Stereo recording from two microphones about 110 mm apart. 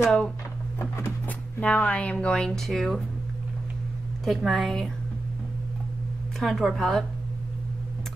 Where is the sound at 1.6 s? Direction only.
10° left (ahead or behind).